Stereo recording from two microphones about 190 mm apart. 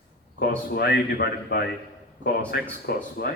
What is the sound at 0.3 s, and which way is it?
A man's voice, 55° left (ahead or behind).